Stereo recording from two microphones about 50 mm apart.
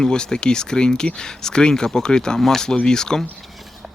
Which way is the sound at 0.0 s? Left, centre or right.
Centre.